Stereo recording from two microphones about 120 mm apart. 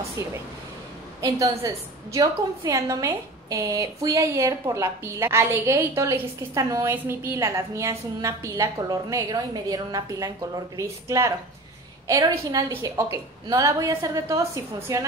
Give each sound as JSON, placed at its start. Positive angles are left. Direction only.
{"t": 0.2, "sound": "a woman's voice", "side_deg": -25}